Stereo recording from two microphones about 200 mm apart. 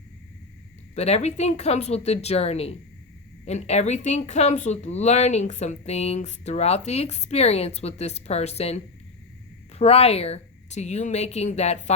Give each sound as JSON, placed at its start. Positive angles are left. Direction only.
{"t": 0.9, "sound": "speech", "side_deg": 30}